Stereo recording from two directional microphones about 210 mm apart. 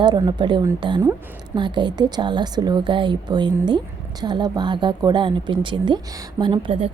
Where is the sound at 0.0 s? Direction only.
20° right (ahead or behind).